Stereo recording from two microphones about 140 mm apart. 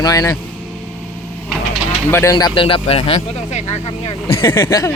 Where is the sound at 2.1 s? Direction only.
25° left (ahead or behind); by 3.6 s 50° left (ahead or behind).